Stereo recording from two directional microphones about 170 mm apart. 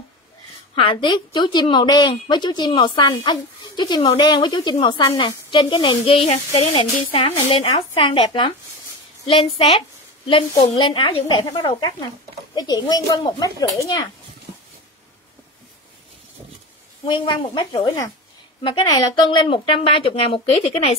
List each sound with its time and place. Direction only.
0.7 s a woman's voice: 30° left (ahead or behind)
14.5 s a sound: 40° right (ahead or behind)
17.0 s a woman's voice: 30° left (ahead or behind)